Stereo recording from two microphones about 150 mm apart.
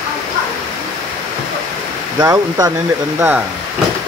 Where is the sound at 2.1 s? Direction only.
25° right (ahead or behind).